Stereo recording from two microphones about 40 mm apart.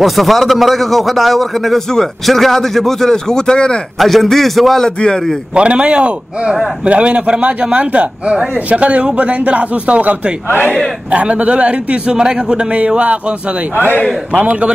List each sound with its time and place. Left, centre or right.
0.0 s a man's voice: centre; by 3.8 s left
4.0 s a man's voice: centre
4.8 s a man's voice: centre
5.5 s speech: right
12.7 s speech: right
14.3 s speech: right